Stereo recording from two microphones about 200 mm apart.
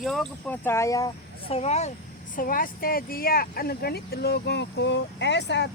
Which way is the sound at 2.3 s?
45° left (ahead or behind).